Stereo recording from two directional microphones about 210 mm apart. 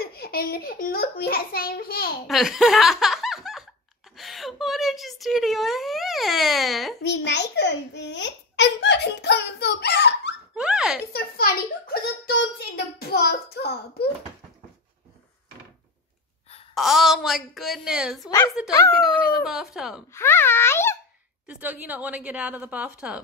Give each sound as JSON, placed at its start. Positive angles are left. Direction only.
{"t": 0.0, "sound": "a child's voice", "side_deg": 45}
{"t": 2.2, "sound": "speech", "side_deg": 0}
{"t": 4.2, "sound": "a sound", "side_deg": 0}
{"t": 7.0, "sound": "babbling", "side_deg": 55}
{"t": 10.5, "sound": "a sound", "side_deg": -5}
{"t": 11.1, "sound": "a sound", "side_deg": 45}
{"t": 16.7, "sound": "speech", "side_deg": 0}
{"t": 20.2, "sound": "a child's voice", "side_deg": 10}
{"t": 21.5, "sound": "a woman's voice", "side_deg": -10}